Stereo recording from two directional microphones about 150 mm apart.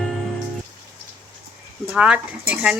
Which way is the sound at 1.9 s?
5° right (ahead or behind).